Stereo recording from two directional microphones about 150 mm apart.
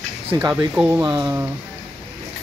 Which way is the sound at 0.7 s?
10° right (ahead or behind).